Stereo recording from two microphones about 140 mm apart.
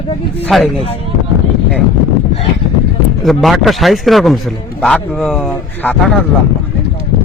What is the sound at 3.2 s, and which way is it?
A man's voice, centre (ahead or behind).